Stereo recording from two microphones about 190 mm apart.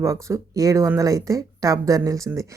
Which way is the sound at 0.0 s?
15° right (ahead or behind).